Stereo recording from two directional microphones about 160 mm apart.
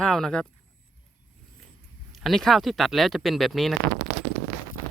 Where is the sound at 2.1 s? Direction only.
Centre (ahead or behind).